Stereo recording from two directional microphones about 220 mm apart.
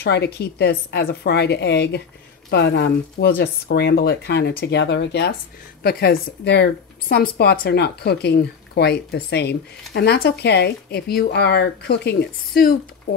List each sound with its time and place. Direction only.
0.0 s speech: 50° left (ahead or behind)